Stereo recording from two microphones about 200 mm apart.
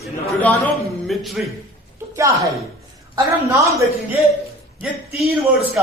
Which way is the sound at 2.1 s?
15° right (ahead or behind).